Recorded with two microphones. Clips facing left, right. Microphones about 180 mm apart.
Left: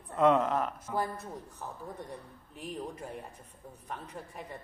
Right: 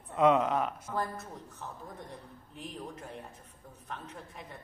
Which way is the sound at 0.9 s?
10° left (ahead or behind).